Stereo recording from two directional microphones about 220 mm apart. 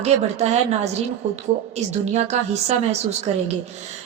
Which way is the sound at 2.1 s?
30° right (ahead or behind).